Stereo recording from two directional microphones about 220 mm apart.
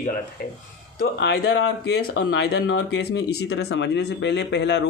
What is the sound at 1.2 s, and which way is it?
Speech, 50° left (ahead or behind).